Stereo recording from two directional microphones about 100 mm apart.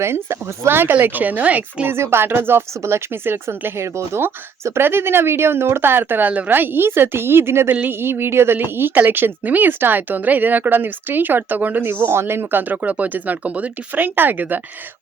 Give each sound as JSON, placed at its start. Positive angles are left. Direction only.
{"t": 0.0, "sound": "a woman's voice", "side_deg": -25}